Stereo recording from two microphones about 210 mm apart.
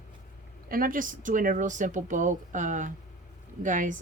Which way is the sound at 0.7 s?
40° right (ahead or behind).